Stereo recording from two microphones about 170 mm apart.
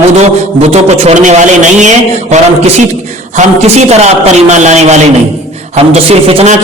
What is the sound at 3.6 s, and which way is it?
A man's voice, 40° right (ahead or behind).